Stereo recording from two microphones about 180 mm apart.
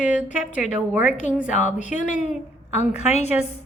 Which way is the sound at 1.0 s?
40° left (ahead or behind).